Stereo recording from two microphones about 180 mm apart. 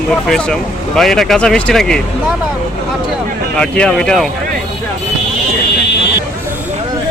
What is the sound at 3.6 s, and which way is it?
Speech, 5° left (ahead or behind).